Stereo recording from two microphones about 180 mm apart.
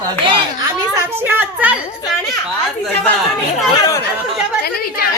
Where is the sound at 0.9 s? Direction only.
10° right (ahead or behind).